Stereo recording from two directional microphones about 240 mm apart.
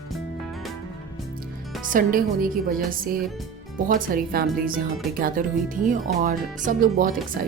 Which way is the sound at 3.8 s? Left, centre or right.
Right.